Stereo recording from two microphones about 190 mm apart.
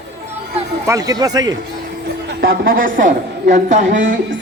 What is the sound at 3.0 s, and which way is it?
Speech, 40° right (ahead or behind).